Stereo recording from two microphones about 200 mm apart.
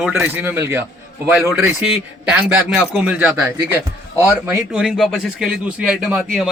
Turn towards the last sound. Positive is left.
turn(degrees=0)  # may be behind; listen again after turning